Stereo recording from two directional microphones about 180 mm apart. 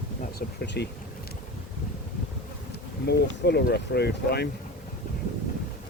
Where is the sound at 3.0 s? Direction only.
65° left (ahead or behind).